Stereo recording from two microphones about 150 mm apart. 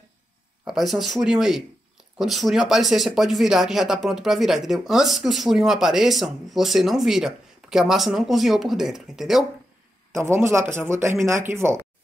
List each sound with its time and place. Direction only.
0.7 s speech: centre (ahead or behind)
10.1 s speech: 20° right (ahead or behind)